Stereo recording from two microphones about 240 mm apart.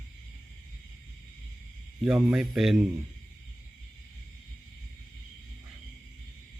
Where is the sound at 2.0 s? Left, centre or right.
Centre.